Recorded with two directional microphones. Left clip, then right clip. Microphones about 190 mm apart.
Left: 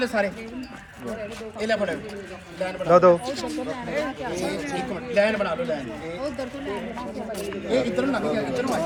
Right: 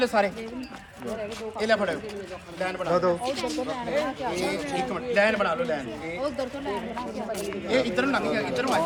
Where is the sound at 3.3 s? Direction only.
25° right (ahead or behind).